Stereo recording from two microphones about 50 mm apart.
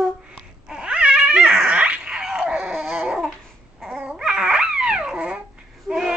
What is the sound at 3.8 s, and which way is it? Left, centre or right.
Baby cry, right.